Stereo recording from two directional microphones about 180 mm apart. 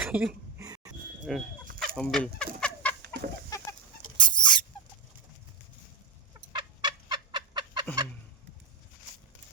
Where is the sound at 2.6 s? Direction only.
10° left (ahead or behind).